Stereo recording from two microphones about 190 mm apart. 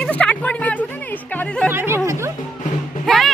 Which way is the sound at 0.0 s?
5° left (ahead or behind).